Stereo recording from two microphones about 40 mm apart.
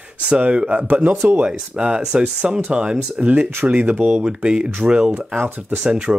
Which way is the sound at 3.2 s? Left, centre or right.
Right.